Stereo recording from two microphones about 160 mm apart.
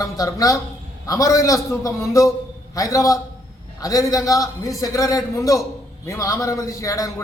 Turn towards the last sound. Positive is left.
turn(degrees=20)  # may be behind; listen again after turning